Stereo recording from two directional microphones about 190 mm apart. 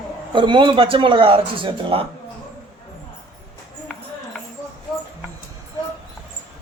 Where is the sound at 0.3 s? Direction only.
25° right (ahead or behind).